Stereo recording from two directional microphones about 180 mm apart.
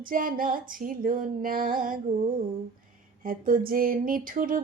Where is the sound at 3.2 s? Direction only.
50° right (ahead or behind).